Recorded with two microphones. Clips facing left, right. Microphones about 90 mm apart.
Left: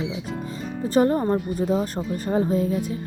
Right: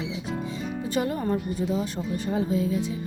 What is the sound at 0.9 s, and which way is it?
Speech, 40° left (ahead or behind).